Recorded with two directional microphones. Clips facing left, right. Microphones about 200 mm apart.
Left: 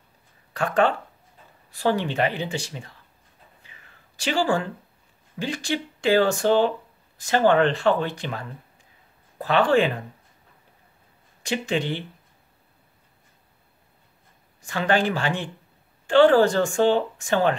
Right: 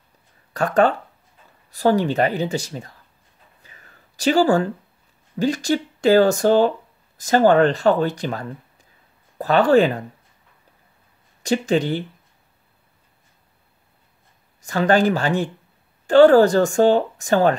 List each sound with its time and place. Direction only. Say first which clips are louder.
0.5 s a woman's voice: right 4 dB; 40° right (ahead or behind)
3.6 s a sound: right 3 dB; 40° right (ahead or behind)
5.4 s a woman's voice: right 7 dB; 40° right (ahead or behind)
11.4 s a woman's voice: right 6 dB; 40° right (ahead or behind)
14.6 s a woman's voice: right 5 dB; 40° right (ahead or behind)